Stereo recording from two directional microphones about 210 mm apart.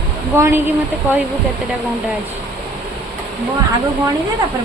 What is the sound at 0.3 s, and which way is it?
Speech, 10° right (ahead or behind).